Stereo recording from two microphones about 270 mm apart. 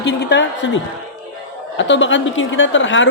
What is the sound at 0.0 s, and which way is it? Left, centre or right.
A woman's voice, left.